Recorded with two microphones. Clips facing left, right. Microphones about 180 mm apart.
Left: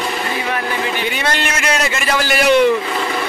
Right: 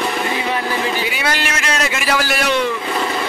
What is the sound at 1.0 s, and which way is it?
A man's voice, 5° right (ahead or behind).